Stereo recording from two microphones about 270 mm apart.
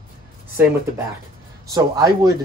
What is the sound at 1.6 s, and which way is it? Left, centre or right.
Speech, centre.